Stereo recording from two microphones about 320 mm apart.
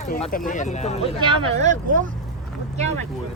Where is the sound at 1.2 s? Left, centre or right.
Centre.